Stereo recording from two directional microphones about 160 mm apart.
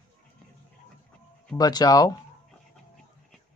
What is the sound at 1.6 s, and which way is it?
Speech, 25° left (ahead or behind).